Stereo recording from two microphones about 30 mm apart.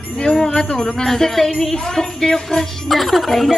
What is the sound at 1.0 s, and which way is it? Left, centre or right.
A woman's voice, centre.